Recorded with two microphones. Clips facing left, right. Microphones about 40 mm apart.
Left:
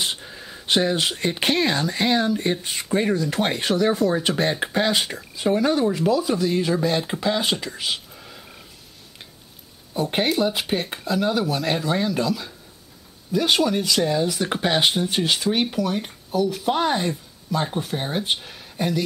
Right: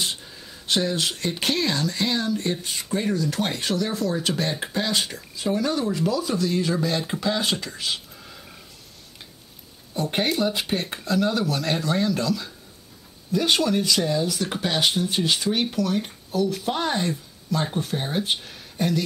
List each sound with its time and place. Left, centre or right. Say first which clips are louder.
0.0 s speech: left 2 dB; left
9.9 s speech: left 2 dB; centre
14.9 s speech: left 1 dB; centre